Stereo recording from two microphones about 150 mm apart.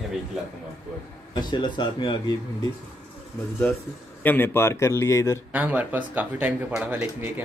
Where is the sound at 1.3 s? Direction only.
30° left (ahead or behind).